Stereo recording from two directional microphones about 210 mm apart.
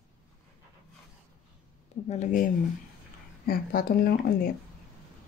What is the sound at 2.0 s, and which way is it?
Speech, 35° left (ahead or behind).